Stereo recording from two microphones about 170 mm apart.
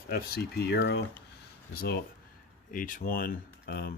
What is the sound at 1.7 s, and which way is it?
Speech, 65° left (ahead or behind).